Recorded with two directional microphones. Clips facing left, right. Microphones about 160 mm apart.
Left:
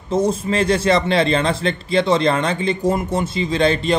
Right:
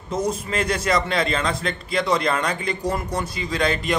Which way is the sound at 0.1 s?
30° left (ahead or behind).